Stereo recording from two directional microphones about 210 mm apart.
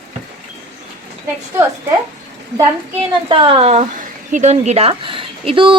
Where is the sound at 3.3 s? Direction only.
25° right (ahead or behind).